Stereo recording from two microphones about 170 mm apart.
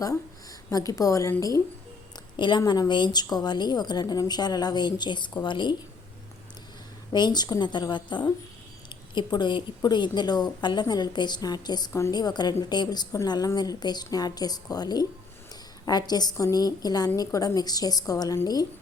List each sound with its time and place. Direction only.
0.7 s speech: 20° left (ahead or behind)
7.1 s speech: 25° left (ahead or behind)